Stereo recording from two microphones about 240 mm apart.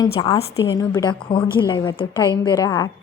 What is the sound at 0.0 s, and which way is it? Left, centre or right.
A woman's voice, centre.